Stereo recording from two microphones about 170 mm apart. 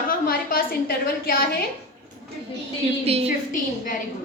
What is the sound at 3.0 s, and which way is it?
Speech, 35° right (ahead or behind).